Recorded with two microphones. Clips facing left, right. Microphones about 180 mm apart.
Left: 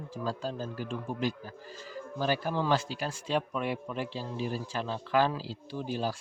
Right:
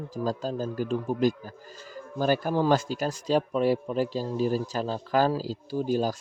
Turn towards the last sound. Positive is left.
turn(degrees=-40)  # may be behind; listen again after turning